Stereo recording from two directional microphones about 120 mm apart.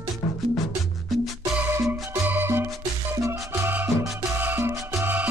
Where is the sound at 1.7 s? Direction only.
20° right (ahead or behind).